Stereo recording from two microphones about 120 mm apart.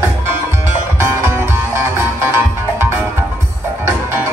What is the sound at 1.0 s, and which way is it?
Music, 20° right (ahead or behind).